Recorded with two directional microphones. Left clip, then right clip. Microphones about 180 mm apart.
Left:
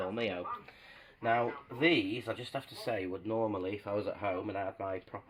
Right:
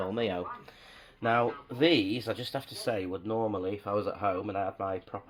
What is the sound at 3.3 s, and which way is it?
Speech, 30° right (ahead or behind).